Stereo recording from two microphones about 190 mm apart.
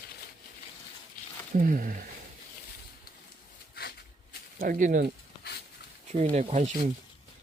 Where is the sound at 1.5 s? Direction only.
45° right (ahead or behind).